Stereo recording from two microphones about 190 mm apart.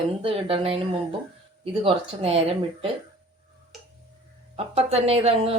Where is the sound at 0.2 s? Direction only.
30° right (ahead or behind).